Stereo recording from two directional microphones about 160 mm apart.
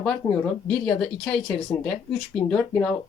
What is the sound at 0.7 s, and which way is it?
Speech, 5° left (ahead or behind).